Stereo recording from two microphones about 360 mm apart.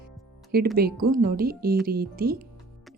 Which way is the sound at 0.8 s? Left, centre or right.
Right.